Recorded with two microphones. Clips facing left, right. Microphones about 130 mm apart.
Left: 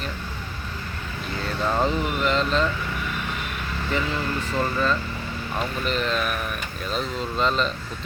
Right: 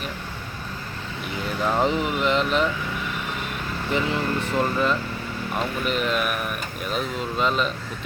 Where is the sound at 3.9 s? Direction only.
20° right (ahead or behind).